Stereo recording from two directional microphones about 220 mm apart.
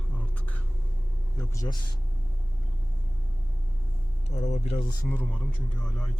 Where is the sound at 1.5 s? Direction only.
15° left (ahead or behind).